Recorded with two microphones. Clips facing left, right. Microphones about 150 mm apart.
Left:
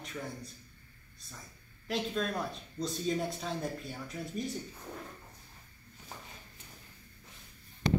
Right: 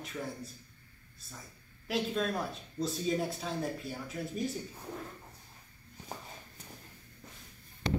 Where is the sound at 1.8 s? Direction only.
5° right (ahead or behind).